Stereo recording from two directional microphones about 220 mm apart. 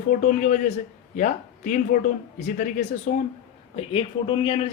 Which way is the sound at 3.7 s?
25° left (ahead or behind).